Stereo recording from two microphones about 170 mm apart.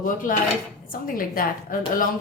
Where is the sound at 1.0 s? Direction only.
55° left (ahead or behind).